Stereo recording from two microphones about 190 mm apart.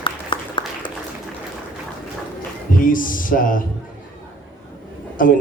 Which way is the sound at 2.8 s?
45° left (ahead or behind).